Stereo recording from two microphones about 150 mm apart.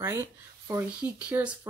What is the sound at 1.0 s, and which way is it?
Speech, 10° right (ahead or behind).